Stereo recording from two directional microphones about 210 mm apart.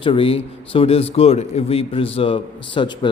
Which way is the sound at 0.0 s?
25° left (ahead or behind).